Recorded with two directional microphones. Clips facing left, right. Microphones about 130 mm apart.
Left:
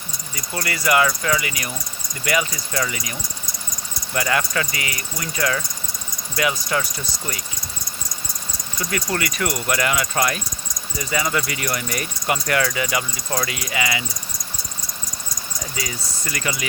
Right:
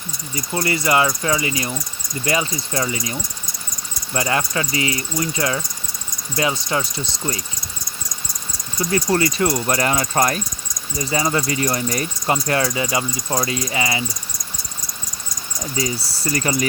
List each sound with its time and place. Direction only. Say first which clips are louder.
0.3 s speech: right 6 dB; 25° right (ahead or behind)
8.8 s speech: right 6 dB; 25° right (ahead or behind)
15.7 s speech: right 9 dB; 35° right (ahead or behind)